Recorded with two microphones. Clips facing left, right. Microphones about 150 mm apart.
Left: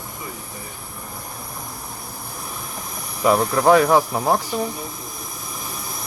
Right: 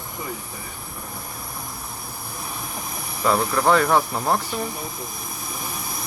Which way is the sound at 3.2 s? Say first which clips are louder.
Left 3 dB; 15° left (ahead or behind).